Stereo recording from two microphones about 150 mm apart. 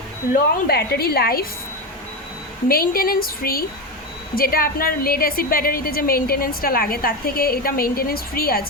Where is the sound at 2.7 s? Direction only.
80° left.